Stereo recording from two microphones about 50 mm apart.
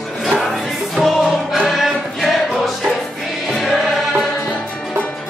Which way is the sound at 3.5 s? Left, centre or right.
Centre.